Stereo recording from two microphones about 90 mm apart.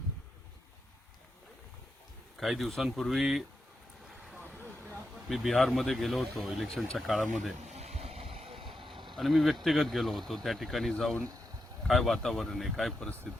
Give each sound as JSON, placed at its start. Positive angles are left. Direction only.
{"t": 2.4, "sound": "speech", "side_deg": 0}
{"t": 5.3, "sound": "speech", "side_deg": 0}
{"t": 8.0, "sound": "vehicle", "side_deg": -90}
{"t": 9.1, "sound": "speech", "side_deg": 0}